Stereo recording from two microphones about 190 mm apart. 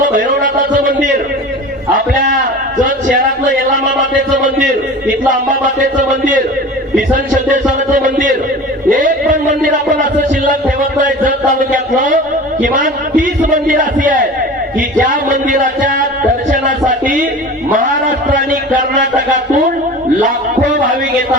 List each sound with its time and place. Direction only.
0.0 s speech: 45° right (ahead or behind)
2.8 s a sound: 45° right (ahead or behind)
5.3 s a man's voice: 45° right (ahead or behind)
9.0 s a sound: 45° right (ahead or behind)
12.6 s a man's voice: 45° right (ahead or behind)
18.3 s a man's voice: 45° right (ahead or behind)